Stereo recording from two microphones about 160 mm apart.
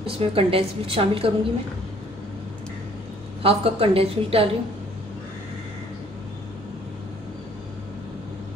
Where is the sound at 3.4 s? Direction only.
35° right (ahead or behind).